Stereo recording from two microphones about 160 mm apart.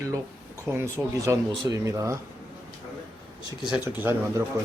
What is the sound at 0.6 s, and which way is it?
Speech, 15° right (ahead or behind).